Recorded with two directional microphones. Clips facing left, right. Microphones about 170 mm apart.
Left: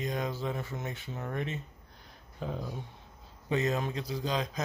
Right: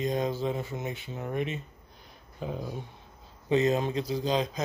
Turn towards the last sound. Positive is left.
turn(degrees=-25)  # may be behind; listen again after turning